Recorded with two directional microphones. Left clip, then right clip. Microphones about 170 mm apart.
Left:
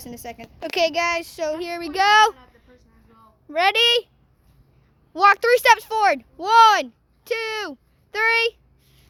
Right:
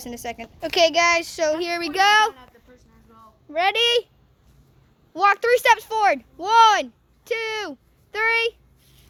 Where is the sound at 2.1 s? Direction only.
55° left (ahead or behind).